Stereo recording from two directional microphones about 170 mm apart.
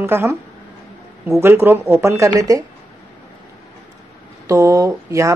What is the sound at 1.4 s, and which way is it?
Speech, 15° right (ahead or behind).